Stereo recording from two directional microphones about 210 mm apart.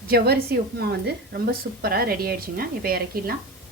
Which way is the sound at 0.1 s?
50° right (ahead or behind).